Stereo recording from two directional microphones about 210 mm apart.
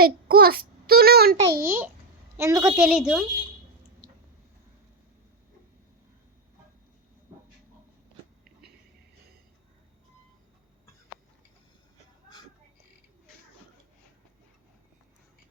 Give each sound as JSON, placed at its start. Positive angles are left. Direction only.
{"t": 0.0, "sound": "a child's voice", "side_deg": -45}
{"t": 1.5, "sound": "a child's voice", "side_deg": -10}
{"t": 2.8, "sound": "speech", "side_deg": -5}